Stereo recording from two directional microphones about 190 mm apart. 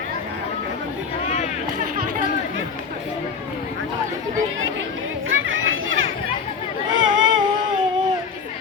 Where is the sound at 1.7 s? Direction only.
45° right (ahead or behind).